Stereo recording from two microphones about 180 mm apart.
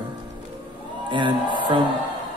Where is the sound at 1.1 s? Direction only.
25° right (ahead or behind).